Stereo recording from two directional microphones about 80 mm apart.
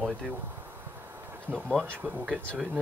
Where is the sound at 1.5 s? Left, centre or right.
Centre.